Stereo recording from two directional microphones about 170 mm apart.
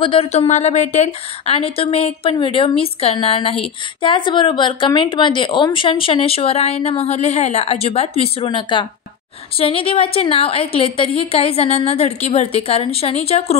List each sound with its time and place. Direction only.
0.0 s speech: 35° left (ahead or behind)